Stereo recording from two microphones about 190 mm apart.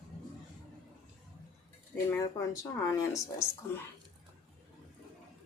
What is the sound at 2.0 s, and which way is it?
Speech, 15° left (ahead or behind).